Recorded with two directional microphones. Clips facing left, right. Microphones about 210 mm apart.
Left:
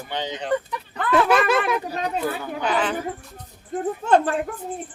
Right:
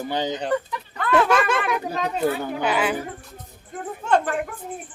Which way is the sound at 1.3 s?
5° left (ahead or behind).